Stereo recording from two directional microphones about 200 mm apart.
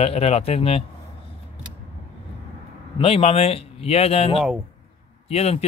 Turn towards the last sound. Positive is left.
turn(degrees=30)  # may be behind; listen again after turning